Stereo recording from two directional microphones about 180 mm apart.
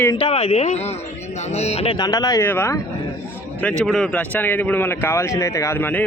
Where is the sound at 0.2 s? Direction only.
35° left (ahead or behind).